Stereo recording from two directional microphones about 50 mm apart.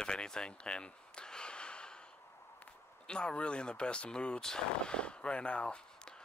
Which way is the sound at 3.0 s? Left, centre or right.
Centre.